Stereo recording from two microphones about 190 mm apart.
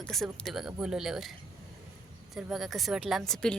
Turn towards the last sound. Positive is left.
turn(degrees=5)  # may be behind; listen again after turning